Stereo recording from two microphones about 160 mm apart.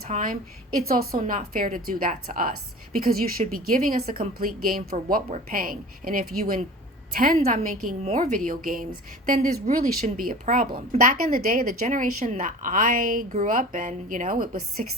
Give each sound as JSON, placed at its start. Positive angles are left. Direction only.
{"t": 0.1, "sound": "a woman's voice", "side_deg": -60}